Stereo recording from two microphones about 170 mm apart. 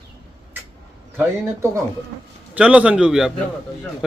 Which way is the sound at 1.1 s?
15° right (ahead or behind).